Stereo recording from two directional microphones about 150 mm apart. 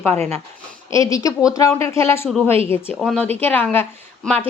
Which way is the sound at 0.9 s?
20° left (ahead or behind).